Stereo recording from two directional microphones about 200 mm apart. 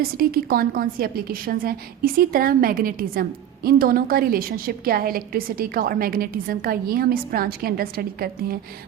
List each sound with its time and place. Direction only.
0.0 s a woman's voice: 45° right (ahead or behind)